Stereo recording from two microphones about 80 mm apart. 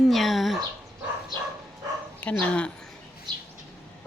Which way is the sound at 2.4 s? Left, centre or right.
Centre.